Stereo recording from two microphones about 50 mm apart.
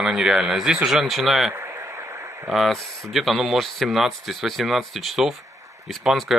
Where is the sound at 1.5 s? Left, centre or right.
Right.